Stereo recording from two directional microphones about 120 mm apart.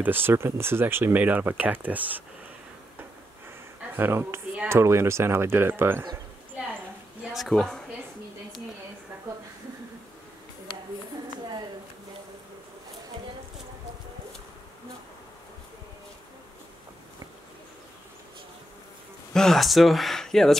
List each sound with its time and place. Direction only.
0.0 s speech: 15° right (ahead or behind)
3.9 s speech: 20° right (ahead or behind)
7.2 s speech: centre (ahead or behind)
19.3 s speech: 5° left (ahead or behind)